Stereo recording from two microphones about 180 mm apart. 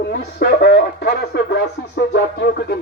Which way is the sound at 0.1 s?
60° left (ahead or behind).